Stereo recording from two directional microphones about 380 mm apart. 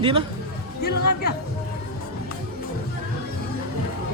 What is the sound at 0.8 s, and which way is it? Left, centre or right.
Music, left.